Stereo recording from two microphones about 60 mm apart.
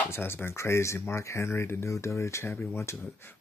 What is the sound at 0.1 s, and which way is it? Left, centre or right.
Speech, left.